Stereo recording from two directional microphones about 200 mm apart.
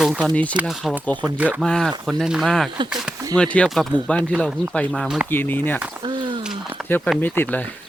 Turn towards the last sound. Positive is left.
turn(degrees=10)  # may be behind; listen again after turning